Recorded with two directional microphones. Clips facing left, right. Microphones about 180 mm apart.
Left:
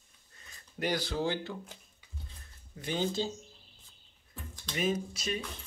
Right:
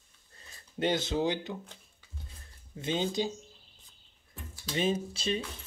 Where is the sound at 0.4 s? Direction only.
25° right (ahead or behind).